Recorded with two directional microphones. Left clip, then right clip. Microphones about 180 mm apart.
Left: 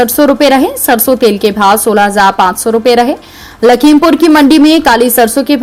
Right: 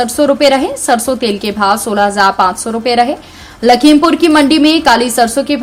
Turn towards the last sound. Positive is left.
turn(degrees=30)  # may be behind; listen again after turning